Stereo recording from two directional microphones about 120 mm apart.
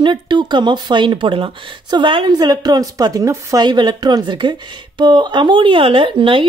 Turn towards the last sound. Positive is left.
turn(degrees=-45)  # may be behind; listen again after turning